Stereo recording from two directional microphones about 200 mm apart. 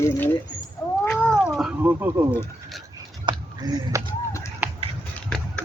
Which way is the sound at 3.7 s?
20° right (ahead or behind).